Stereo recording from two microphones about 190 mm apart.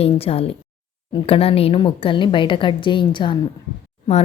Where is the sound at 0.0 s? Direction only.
30° left (ahead or behind).